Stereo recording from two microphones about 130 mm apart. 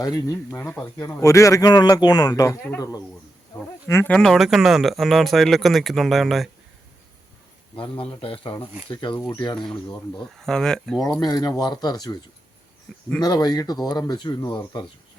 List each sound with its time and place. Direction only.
0.0 s speech: 25° left (ahead or behind)
3.5 s insect: 20° left (ahead or behind)
4.1 s speech: 5° left (ahead or behind)
8.2 s speech: 45° left (ahead or behind)
9.1 s speech: 15° left (ahead or behind)
11.2 s speech: 30° left (ahead or behind)